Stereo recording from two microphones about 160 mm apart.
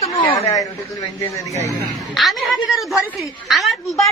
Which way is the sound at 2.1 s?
Centre (ahead or behind).